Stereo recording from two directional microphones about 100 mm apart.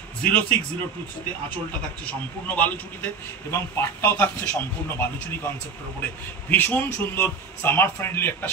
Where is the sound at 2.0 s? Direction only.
15° left (ahead or behind).